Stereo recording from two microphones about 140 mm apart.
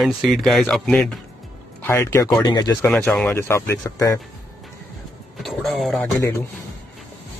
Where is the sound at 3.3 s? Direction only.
20° left (ahead or behind).